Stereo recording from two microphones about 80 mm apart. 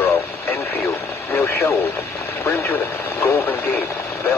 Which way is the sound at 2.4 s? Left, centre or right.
Left.